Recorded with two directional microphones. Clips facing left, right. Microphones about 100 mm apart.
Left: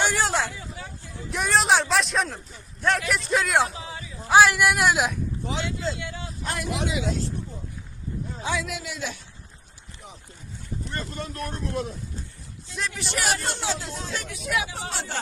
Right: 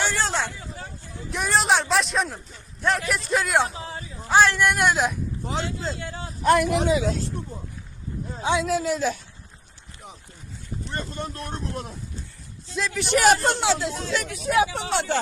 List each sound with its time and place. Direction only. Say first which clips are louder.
0.0 s hubbub: left 1 dB; 15° left (ahead or behind)
1.3 s speech: even; centre (ahead or behind)
3.8 s a sound: right 2 dB; 35° right (ahead or behind)
4.3 s speech: left 1 dB; 10° left (ahead or behind)
5.5 s speech: right 1 dB; 40° right (ahead or behind)
6.4 s speech: right 10 dB; 55° right (ahead or behind); by 7.1 s 40° right (ahead or behind)
8.4 s speech: right 8 dB; 30° right (ahead or behind)
10.9 s speech: right 2 dB; 25° right (ahead or behind)
13.0 s speech: right 10 dB; 50° right (ahead or behind)
13.6 s speech: right 6 dB; 90° right
14.3 s speech: right 7 dB; 35° right (ahead or behind)
14.8 s speech: right 7 dB; 75° right (ahead or behind)